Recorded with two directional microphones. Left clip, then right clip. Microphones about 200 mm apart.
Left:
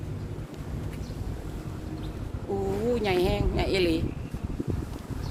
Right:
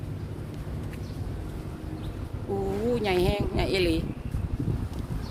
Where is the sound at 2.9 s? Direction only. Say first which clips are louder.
Right 1 dB; 5° right (ahead or behind).